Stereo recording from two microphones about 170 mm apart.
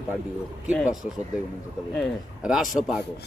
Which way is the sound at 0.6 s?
5° right (ahead or behind).